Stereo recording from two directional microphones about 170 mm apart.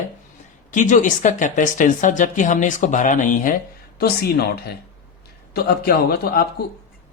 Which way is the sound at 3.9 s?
65° left (ahead or behind).